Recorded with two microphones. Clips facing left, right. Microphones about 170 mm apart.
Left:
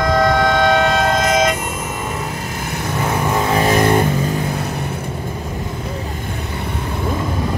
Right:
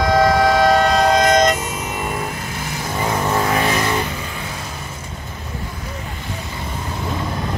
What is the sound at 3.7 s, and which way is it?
Vehicle, 50° left (ahead or behind).